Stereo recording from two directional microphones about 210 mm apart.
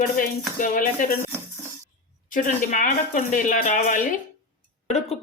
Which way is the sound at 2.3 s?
35° left (ahead or behind).